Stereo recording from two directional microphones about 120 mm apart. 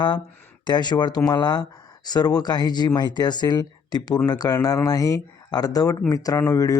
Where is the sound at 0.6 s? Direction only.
35° left (ahead or behind).